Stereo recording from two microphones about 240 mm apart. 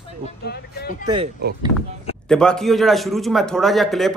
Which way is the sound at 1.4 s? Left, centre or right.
Right.